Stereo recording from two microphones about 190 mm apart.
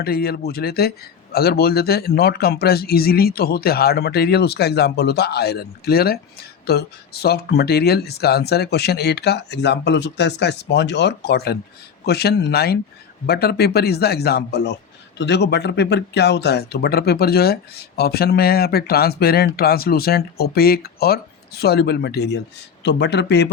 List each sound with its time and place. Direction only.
0.0 s speech: 55° left (ahead or behind)